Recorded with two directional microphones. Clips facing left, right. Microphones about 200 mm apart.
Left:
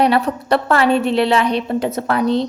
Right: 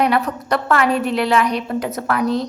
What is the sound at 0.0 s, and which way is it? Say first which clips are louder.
A woman's voice: left 3 dB; 30° left (ahead or behind).